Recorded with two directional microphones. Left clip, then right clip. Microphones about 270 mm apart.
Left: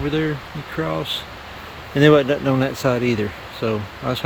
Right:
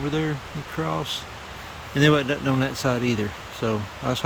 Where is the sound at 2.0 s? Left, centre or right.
Centre.